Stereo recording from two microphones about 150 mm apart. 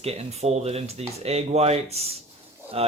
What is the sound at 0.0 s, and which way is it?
Speech, 45° right (ahead or behind).